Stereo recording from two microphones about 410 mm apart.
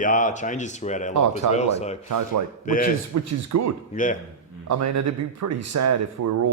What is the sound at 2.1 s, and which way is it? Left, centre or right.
Speech, right.